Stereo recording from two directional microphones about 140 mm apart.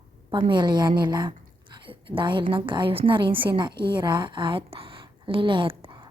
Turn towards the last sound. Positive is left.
turn(degrees=-40)  # may be behind; listen again after turning